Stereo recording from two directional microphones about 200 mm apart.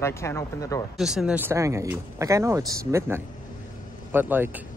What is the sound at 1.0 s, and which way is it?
Speech, centre (ahead or behind).